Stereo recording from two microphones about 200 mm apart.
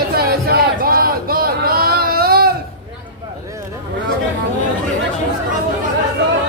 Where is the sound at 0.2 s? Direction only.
50° right (ahead or behind).